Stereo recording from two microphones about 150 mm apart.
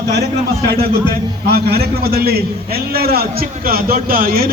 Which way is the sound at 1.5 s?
90° right.